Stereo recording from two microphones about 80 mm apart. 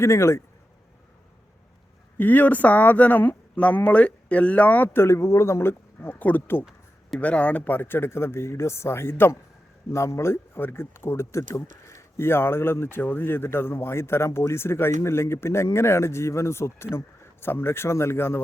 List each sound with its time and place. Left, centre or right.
0.0 s speech: left
2.1 s speech: left
4.9 s speech: left